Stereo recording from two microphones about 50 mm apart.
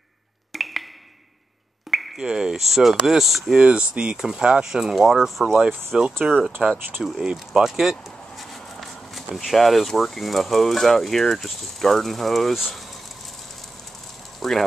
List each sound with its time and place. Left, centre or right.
0.5 s a sound: centre
1.9 s a sound: centre
2.1 s speech: centre
3.5 s speech: right; by 5.6 s centre
5.9 s speech: centre
6.6 s speech: centre
7.2 s speech: centre
7.7 s speech: centre
14.4 s a sound: centre